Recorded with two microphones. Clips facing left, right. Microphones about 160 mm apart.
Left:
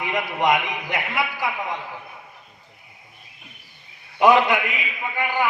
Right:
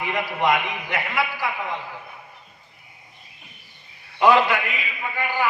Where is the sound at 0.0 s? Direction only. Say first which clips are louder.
Left 1 dB; 20° left (ahead or behind).